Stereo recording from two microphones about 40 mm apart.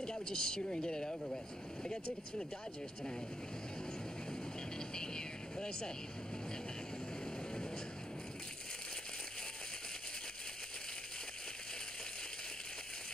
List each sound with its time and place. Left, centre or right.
0.0 s speech: centre
4.9 s speech: centre